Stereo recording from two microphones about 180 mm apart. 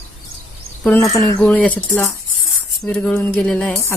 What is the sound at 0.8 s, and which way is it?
Speech, 15° left (ahead or behind).